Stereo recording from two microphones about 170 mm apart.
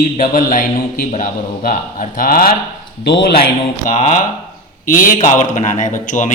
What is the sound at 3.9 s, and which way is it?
A man's voice, 55° left (ahead or behind).